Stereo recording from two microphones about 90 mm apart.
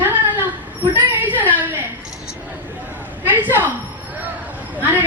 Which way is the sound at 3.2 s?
20° right (ahead or behind).